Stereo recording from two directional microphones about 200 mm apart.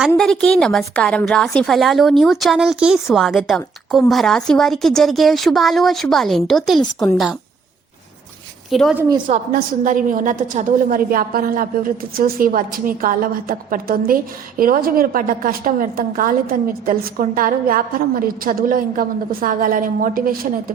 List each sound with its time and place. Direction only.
0.2 s a woman's voice: 5° left (ahead or behind)
8.7 s a woman's voice: centre (ahead or behind)
9.0 s a woman's voice: 20° right (ahead or behind)
9.2 s a woman's voice: 45° right (ahead or behind)